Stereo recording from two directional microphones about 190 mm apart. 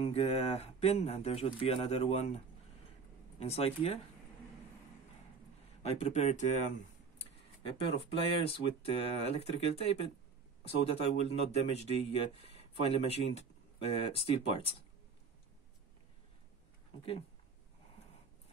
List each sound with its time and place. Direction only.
0.0 s a man's voice: 35° left (ahead or behind)
5.8 s a man's voice: 35° left (ahead or behind)
8.0 s a man's voice: 30° left (ahead or behind)